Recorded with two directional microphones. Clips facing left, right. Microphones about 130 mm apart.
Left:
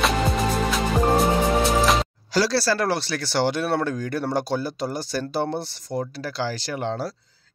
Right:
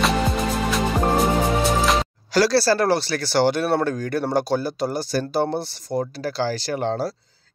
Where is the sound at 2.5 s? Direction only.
35° right (ahead or behind).